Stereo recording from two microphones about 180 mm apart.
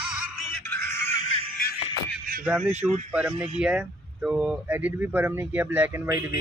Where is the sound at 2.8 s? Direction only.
5° right (ahead or behind).